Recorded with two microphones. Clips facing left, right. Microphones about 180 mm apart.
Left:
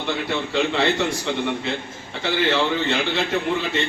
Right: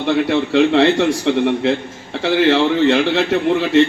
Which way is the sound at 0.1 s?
70° right (ahead or behind).